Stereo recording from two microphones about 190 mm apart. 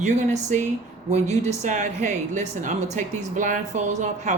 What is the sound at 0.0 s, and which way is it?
Speech, 40° right (ahead or behind).